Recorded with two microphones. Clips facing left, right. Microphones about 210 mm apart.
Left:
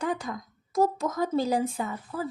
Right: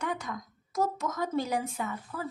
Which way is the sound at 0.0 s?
30° left (ahead or behind).